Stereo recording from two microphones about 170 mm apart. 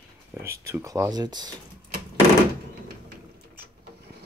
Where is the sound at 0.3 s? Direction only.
15° right (ahead or behind).